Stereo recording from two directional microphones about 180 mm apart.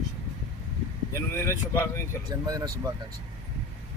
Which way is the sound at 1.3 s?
15° left (ahead or behind).